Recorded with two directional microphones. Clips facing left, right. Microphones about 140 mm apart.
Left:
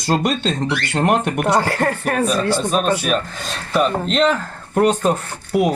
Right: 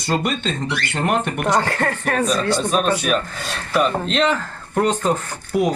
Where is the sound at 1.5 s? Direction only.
10° left (ahead or behind).